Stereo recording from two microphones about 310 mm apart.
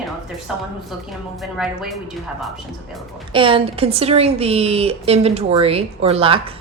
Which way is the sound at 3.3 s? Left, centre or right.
Centre.